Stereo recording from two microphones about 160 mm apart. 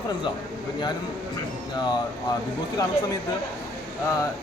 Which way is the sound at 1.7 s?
25° left (ahead or behind).